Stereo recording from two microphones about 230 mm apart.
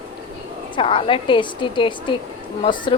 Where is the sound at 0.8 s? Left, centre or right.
Left.